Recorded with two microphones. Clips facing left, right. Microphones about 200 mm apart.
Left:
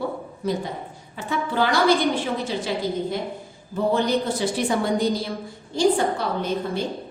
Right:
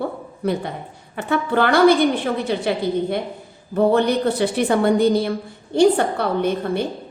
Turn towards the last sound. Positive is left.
turn(degrees=-60)  # may be behind; listen again after turning